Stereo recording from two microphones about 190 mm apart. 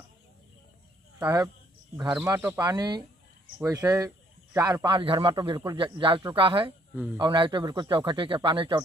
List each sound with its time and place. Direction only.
1.2 s speech: 20° right (ahead or behind)